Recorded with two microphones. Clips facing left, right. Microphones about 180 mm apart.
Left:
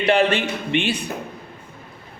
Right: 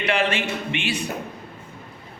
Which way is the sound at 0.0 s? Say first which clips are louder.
Left 5 dB; 35° left (ahead or behind).